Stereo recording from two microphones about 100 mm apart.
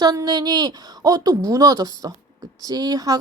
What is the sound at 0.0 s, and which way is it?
Speech, 40° right (ahead or behind).